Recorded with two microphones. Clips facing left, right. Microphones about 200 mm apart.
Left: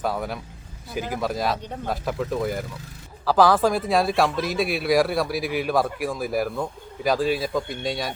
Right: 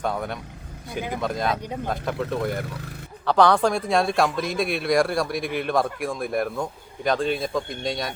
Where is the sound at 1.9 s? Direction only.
5° left (ahead or behind).